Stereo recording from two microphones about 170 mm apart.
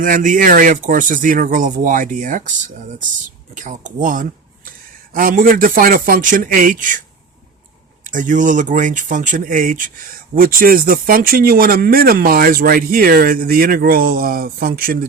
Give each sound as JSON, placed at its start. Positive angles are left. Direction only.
{"t": 0.0, "sound": "speech", "side_deg": -50}
{"t": 8.0, "sound": "speech", "side_deg": -50}